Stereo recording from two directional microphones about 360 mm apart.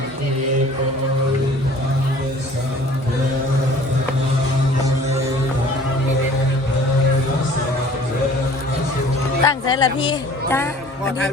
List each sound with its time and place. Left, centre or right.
9.4 s music: centre